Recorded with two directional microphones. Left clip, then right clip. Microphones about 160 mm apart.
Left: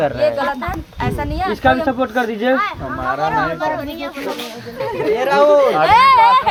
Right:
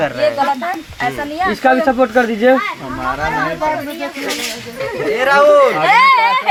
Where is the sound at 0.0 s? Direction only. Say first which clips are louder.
Right 1 dB; 45° left (ahead or behind).